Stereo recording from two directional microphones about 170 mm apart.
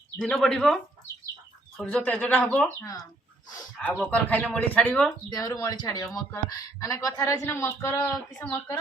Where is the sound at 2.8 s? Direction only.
20° left (ahead or behind).